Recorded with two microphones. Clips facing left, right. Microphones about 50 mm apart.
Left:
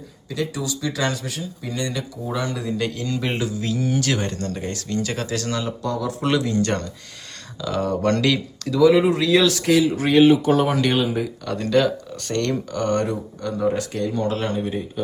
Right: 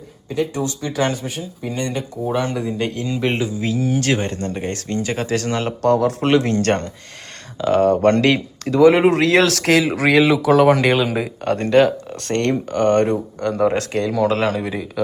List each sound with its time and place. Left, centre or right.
0.3 s speech: right
2.6 s speech: right
3.8 s speech: centre
4.0 s speech: right
5.9 s speech: right
7.6 s speech: right
11.4 s speech: right
13.5 s speech: right